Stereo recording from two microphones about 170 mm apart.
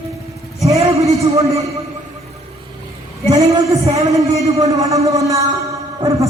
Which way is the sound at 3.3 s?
40° right (ahead or behind).